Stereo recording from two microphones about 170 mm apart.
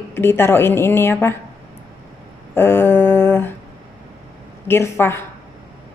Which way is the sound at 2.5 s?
15° left (ahead or behind).